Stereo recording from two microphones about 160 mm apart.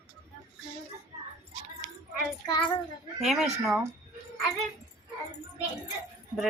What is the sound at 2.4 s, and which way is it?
Child singing, 25° left (ahead or behind).